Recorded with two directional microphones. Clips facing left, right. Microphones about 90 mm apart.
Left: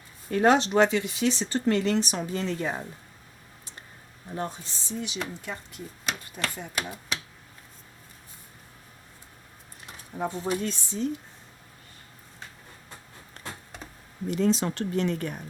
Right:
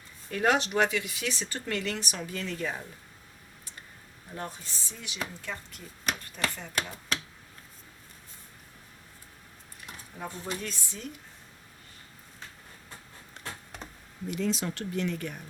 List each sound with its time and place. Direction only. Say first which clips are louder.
0.3 s speech: left 5 dB; 35° left (ahead or behind)
4.4 s speech: left 5 dB; 25° left (ahead or behind)
6.5 s speech: left 1 dB; 15° left (ahead or behind)
9.8 s a sound: left 8 dB; 35° left (ahead or behind)
10.6 s speech: left 9 dB; 30° left (ahead or behind)
14.3 s speech: left 6 dB; 35° left (ahead or behind)